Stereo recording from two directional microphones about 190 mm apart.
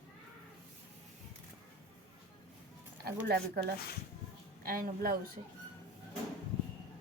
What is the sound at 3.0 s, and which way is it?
A woman's voice, 55° right (ahead or behind).